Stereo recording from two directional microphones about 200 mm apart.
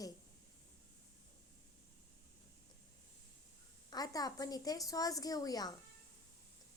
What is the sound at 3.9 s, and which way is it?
Speech, 20° left (ahead or behind).